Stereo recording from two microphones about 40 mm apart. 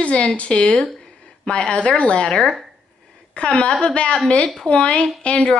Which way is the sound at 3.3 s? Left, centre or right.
Left.